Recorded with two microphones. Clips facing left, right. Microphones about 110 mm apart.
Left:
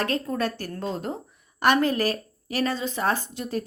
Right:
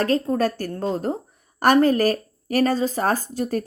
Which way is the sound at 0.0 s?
35° right (ahead or behind).